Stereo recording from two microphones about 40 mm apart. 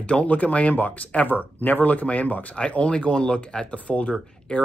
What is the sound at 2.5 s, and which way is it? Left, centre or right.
Speech, left.